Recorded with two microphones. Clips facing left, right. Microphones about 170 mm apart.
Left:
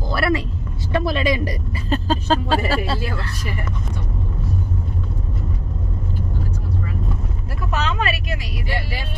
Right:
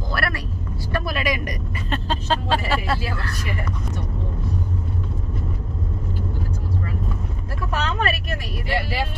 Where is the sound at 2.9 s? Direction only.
25° left (ahead or behind).